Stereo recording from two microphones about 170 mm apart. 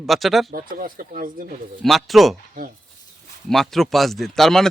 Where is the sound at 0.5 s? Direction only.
55° right (ahead or behind).